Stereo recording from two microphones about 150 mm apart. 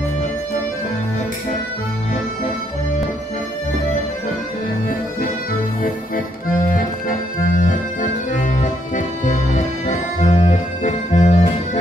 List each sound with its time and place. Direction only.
6.7 s accordion: 65° left (ahead or behind)